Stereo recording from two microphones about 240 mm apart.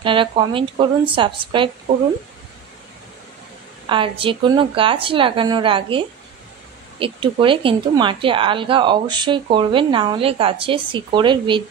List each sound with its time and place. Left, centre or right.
0.0 s speech: right
3.9 s speech: right